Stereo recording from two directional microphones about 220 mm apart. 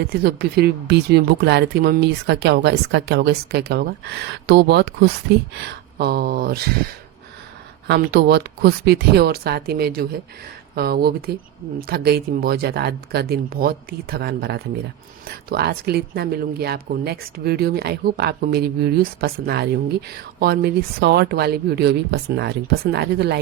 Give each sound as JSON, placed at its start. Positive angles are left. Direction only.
{"t": 0.1, "sound": "speech", "side_deg": -45}
{"t": 7.9, "sound": "speech", "side_deg": -45}